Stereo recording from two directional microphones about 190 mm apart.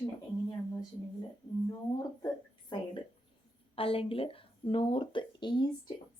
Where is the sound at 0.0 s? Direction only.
20° left (ahead or behind).